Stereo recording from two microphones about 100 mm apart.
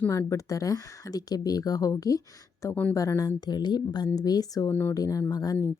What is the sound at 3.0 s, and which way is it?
Speech, 35° left (ahead or behind).